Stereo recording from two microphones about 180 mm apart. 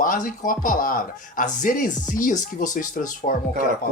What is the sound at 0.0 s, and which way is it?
Speech, 50° left (ahead or behind).